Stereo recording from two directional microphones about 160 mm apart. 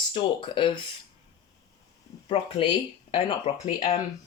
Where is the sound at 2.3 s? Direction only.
35° left (ahead or behind).